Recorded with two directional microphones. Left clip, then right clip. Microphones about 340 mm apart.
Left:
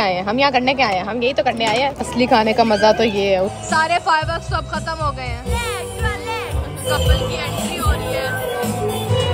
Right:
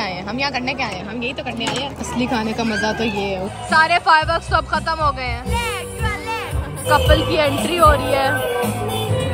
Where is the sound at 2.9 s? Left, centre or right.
Centre.